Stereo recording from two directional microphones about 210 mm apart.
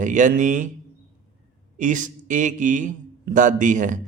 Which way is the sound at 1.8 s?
35° right (ahead or behind).